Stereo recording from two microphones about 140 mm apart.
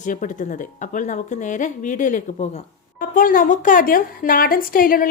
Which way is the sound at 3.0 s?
85° left.